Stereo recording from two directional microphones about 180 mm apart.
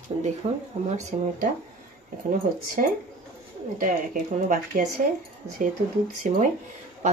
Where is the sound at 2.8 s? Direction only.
45° right (ahead or behind).